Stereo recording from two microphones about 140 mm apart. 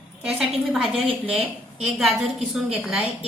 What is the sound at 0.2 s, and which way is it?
A woman's voice, 5° right (ahead or behind).